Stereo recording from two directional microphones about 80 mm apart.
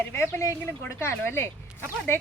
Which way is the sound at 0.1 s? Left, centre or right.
Left.